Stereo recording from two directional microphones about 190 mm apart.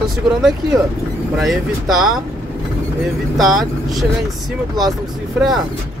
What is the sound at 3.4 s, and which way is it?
Speech, centre (ahead or behind).